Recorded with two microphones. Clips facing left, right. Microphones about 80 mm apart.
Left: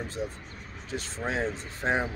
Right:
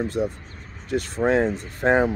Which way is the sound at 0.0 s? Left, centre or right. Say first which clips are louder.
Right 9 dB; right.